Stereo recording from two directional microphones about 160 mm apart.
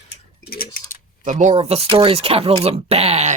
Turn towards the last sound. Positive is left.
turn(degrees=-40)  # may be behind; listen again after turning